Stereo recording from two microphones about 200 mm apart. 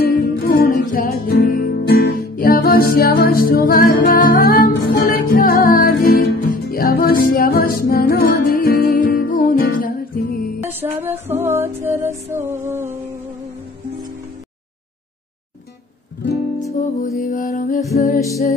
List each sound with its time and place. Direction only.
0.0 s music: 50° left (ahead or behind)
10.6 s music: 10° right (ahead or behind)
16.8 s music: 40° left (ahead or behind)